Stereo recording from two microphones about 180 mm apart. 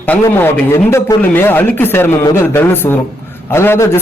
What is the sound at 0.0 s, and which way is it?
A man's voice, 10° left (ahead or behind).